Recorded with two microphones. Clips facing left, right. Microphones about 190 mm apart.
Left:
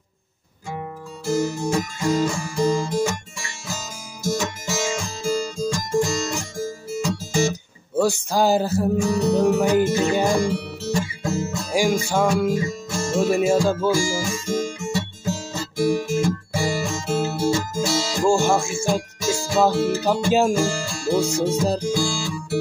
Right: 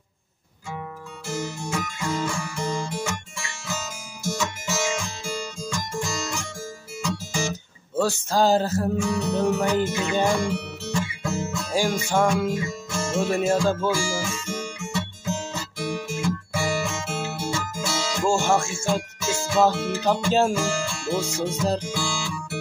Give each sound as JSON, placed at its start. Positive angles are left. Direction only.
{"t": 1.2, "sound": "music", "side_deg": 35}
{"t": 7.9, "sound": "music", "side_deg": 10}
{"t": 8.9, "sound": "music", "side_deg": 35}
{"t": 11.7, "sound": "music", "side_deg": 10}
{"t": 12.5, "sound": "music", "side_deg": 35}
{"t": 13.2, "sound": "music", "side_deg": 10}
{"t": 13.9, "sound": "guitar", "side_deg": 40}
{"t": 18.3, "sound": "music", "side_deg": 10}
{"t": 18.9, "sound": "music", "side_deg": 40}
{"t": 20.2, "sound": "music", "side_deg": 10}
{"t": 20.5, "sound": "speech", "side_deg": 40}
{"t": 21.2, "sound": "music", "side_deg": 10}
{"t": 21.8, "sound": "music", "side_deg": 40}